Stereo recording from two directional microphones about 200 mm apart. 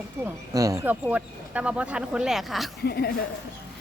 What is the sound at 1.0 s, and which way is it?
Speech, 5° right (ahead or behind).